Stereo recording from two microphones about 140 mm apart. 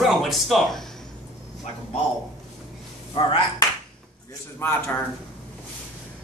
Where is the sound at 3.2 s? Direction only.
40° left (ahead or behind).